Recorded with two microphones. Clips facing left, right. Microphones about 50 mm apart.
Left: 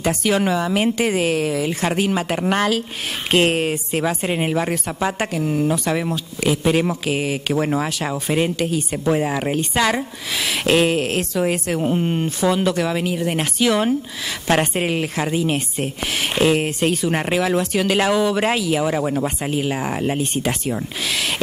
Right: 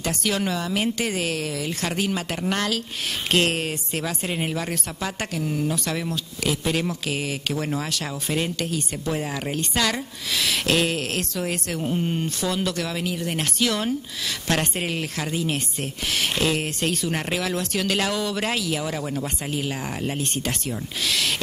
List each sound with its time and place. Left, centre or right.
0.0 s a woman's voice: centre